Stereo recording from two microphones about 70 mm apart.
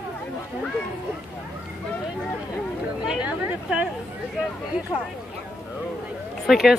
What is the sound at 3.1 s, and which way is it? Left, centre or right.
Speech, centre.